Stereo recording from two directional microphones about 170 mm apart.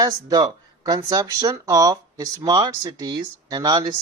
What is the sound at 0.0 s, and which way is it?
Speech, 20° right (ahead or behind).